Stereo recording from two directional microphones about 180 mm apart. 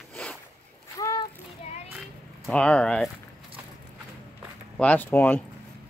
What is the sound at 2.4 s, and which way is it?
Speech, 5° left (ahead or behind).